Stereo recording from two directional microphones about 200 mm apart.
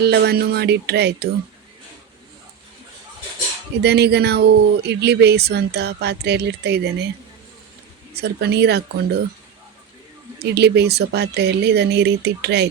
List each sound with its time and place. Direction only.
0.0 s speech: 55° right (ahead or behind)
3.8 s speech: 55° right (ahead or behind)
8.1 s speech: 55° right (ahead or behind)
10.4 s speech: 55° right (ahead or behind)